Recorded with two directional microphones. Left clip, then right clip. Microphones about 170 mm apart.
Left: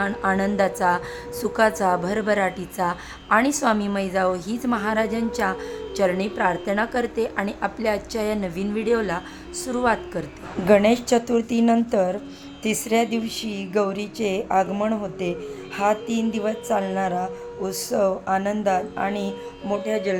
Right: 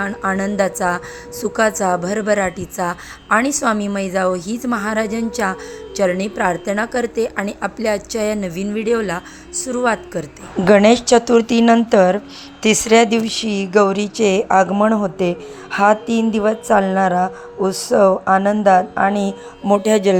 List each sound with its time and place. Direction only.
0.0 s a woman's voice: 20° right (ahead or behind)
19.6 s music: 60° right (ahead or behind)